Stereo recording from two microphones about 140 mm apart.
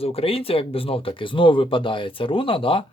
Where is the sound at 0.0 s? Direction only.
45° left (ahead or behind).